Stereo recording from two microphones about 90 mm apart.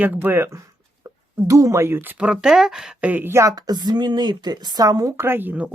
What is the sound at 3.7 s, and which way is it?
Speech, 50° right (ahead or behind).